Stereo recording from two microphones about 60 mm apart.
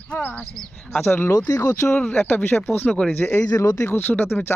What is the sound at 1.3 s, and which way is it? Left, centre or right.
Speech, left.